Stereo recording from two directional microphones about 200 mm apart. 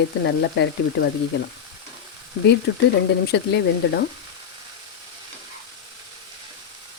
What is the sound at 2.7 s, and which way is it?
Speech, 60° left (ahead or behind).